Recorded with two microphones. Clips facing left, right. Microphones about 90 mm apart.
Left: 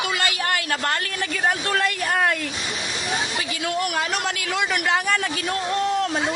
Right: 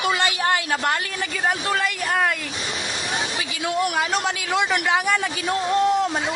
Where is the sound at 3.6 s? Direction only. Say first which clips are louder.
Right 3 dB; 15° right (ahead or behind).